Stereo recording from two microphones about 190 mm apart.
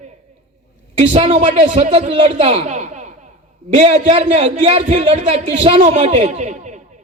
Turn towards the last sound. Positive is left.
turn(degrees=-40)  # may be behind; listen again after turning